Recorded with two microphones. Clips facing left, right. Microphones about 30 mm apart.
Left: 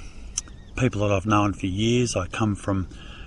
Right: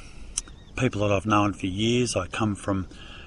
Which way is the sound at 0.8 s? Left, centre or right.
Centre.